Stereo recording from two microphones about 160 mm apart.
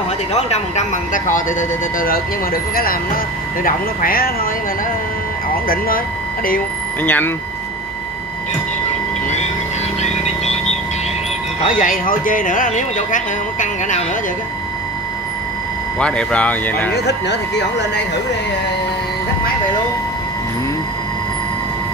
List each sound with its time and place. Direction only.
0.3 s speech: 45° left (ahead or behind); by 4.5 s 65° left (ahead or behind)
5.7 s speech: 65° left (ahead or behind)
7.0 s speech: 10° left (ahead or behind)
10.0 s a sound: 45° left (ahead or behind)
11.8 s speech: 60° left (ahead or behind)
16.0 s speech: 5° left (ahead or behind)
16.9 s speech: 90° left